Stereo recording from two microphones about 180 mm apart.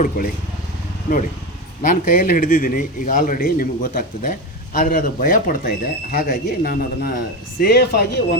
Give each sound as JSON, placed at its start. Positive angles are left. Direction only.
{"t": 0.2, "sound": "speech", "side_deg": 60}
{"t": 1.8, "sound": "a man's voice", "side_deg": 50}